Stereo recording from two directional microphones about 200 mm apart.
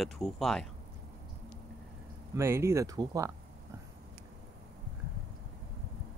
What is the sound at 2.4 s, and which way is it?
Speech, 15° right (ahead or behind).